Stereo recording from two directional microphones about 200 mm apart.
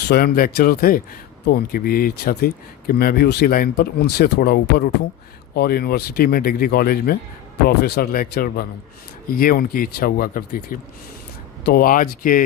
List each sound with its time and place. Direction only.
0.0 s speech: 50° left (ahead or behind)